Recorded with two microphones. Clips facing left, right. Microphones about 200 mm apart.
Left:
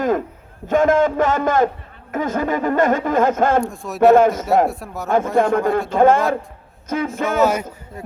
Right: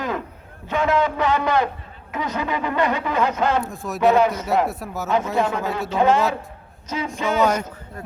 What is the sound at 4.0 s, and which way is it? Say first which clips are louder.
Speech: left 5 dB; 50° left (ahead or behind).